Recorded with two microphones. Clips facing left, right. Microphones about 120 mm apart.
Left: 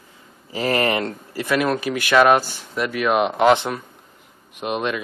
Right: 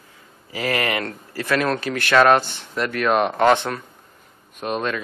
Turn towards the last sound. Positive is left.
turn(degrees=15)  # may be behind; listen again after turning